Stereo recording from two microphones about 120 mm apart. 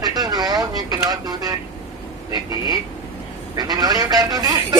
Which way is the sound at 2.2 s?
30° right (ahead or behind).